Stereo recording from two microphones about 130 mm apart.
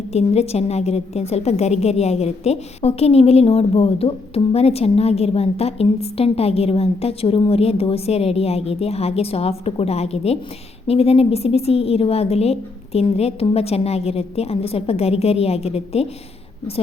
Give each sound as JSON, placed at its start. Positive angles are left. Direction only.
{"t": 0.1, "sound": "a woman's voice", "side_deg": 55}